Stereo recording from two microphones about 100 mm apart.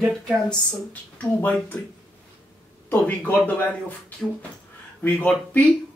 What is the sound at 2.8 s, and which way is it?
Speech, 15° left (ahead or behind).